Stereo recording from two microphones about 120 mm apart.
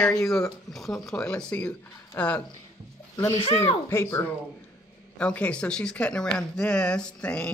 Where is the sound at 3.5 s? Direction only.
20° left (ahead or behind).